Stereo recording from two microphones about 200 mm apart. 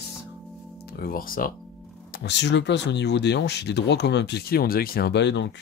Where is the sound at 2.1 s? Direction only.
60° left (ahead or behind).